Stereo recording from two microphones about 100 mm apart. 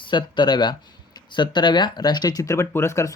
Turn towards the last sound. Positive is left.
turn(degrees=30)  # may be behind; listen again after turning